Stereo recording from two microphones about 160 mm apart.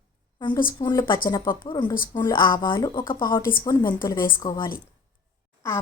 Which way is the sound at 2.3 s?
30° left (ahead or behind).